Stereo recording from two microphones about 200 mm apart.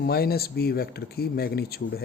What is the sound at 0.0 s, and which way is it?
Speech, 50° left (ahead or behind).